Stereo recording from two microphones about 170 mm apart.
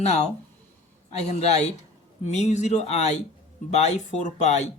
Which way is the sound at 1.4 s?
40° left (ahead or behind).